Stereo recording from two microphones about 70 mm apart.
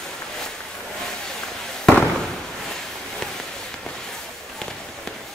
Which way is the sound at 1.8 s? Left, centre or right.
Centre.